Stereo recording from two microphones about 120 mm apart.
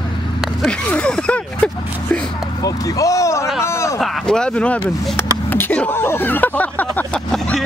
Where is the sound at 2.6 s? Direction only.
30° left (ahead or behind).